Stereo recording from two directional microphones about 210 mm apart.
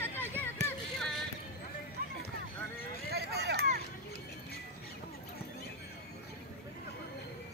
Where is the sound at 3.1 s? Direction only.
50° right (ahead or behind).